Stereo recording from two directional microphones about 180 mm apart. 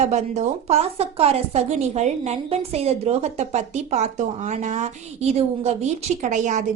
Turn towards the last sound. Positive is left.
turn(degrees=-45)  # may be behind; listen again after turning